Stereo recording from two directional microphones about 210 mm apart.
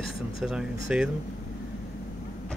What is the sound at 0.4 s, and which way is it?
Speech, centre (ahead or behind).